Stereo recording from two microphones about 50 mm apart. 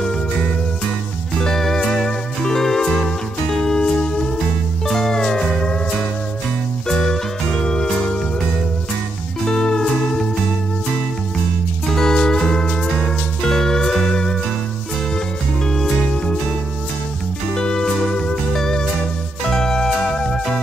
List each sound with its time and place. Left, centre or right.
1.4 s music: centre
6.9 s music: centre
9.5 s music: centre
11.9 s music: centre
15.6 s music: centre
17.6 s music: centre